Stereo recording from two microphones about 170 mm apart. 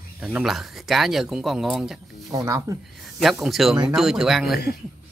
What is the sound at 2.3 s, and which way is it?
Speech, 20° right (ahead or behind).